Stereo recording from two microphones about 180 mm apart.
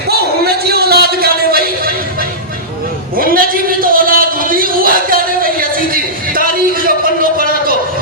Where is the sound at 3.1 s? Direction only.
55° right (ahead or behind).